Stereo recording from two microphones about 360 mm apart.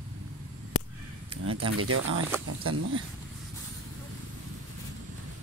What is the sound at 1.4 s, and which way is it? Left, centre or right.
Speech, right.